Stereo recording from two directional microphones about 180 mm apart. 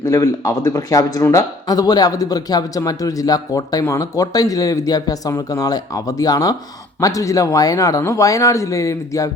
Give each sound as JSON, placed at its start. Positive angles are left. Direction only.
{"t": 0.0, "sound": "speech", "side_deg": 15}